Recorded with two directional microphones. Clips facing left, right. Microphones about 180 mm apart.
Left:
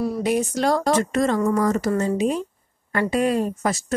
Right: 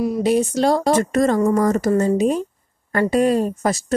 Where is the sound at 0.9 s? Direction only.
45° right (ahead or behind).